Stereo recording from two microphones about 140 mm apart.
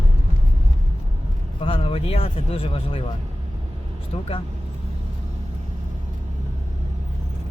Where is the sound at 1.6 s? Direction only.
40° left (ahead or behind).